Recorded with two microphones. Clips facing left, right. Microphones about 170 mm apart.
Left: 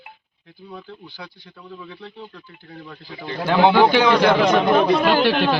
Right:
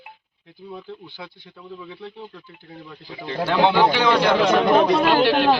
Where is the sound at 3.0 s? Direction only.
20° right (ahead or behind).